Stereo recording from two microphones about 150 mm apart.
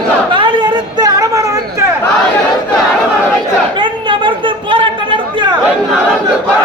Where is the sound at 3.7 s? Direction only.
35° right (ahead or behind).